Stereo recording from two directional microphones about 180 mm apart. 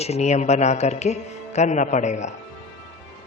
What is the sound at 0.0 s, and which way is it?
Music, 35° left (ahead or behind).